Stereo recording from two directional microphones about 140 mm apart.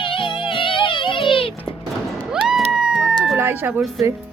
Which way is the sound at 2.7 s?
5° right (ahead or behind).